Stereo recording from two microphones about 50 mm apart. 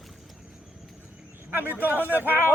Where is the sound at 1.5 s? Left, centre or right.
Right.